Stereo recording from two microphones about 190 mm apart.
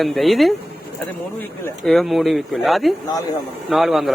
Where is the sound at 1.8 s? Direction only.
Centre (ahead or behind).